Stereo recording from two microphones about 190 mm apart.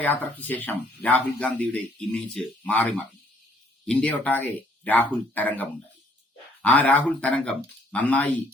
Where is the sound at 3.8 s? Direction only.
5° left (ahead or behind).